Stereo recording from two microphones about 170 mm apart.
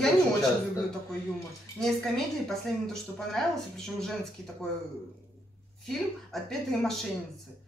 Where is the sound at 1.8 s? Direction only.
5° left (ahead or behind).